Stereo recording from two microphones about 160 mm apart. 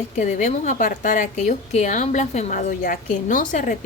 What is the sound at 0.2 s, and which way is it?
A woman's voice, 50° left (ahead or behind).